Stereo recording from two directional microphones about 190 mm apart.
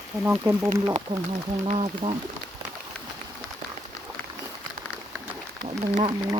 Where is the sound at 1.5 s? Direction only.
35° right (ahead or behind).